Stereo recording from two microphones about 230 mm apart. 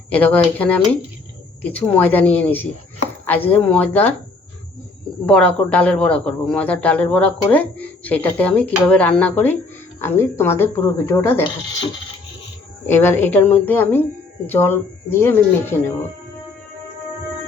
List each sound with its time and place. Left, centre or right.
0.1 s speech: centre
5.2 s a man's voice: centre
12.9 s speech: centre